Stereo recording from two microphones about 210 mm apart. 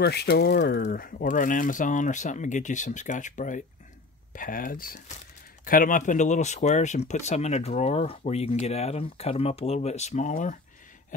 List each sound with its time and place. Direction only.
0.0 s speech: 50° left (ahead or behind)
0.8 s speech: 40° left (ahead or behind)